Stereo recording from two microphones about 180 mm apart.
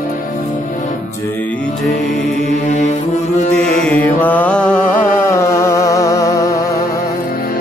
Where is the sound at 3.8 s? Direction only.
10° left (ahead or behind).